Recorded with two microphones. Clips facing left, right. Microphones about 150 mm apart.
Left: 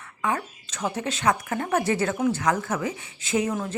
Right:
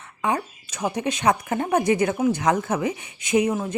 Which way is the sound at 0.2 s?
15° right (ahead or behind).